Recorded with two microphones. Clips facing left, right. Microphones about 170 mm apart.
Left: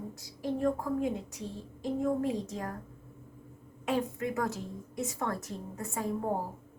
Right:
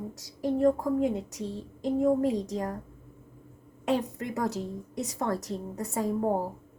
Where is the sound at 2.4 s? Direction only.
40° right (ahead or behind).